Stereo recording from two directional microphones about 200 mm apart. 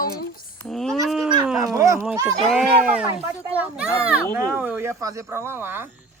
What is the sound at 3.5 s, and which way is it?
A woman's voice, 5° right (ahead or behind).